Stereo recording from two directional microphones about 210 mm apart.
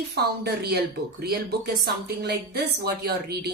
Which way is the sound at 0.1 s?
50° right (ahead or behind).